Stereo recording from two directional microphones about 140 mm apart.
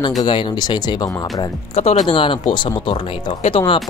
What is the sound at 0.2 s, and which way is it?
Speech, 35° left (ahead or behind).